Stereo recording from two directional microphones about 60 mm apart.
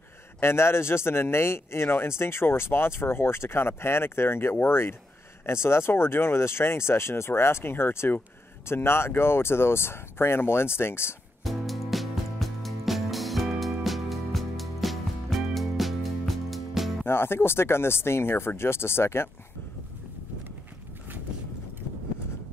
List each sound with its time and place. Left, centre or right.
0.4 s speech: left
11.4 s music: centre
17.0 s speech: left